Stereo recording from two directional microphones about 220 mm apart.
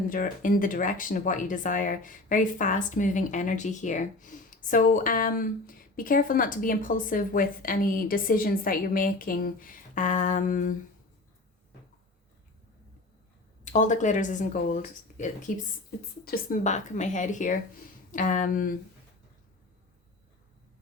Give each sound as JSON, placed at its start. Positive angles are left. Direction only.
{"t": 0.1, "sound": "speech", "side_deg": 40}
{"t": 13.7, "sound": "speech", "side_deg": 35}